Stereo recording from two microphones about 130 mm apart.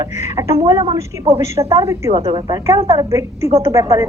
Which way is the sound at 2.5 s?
25° right (ahead or behind).